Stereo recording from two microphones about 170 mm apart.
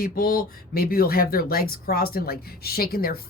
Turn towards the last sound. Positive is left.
turn(degrees=65)  # may be behind; listen again after turning